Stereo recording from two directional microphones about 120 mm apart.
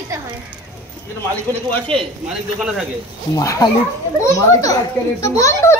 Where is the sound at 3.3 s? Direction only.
25° left (ahead or behind).